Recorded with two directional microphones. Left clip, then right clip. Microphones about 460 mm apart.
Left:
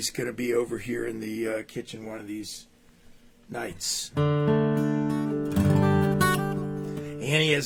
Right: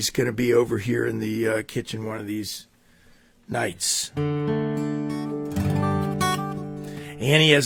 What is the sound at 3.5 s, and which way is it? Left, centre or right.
Speech, right.